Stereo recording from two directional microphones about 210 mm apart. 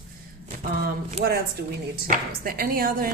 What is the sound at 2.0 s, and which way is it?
Speech, 45° right (ahead or behind).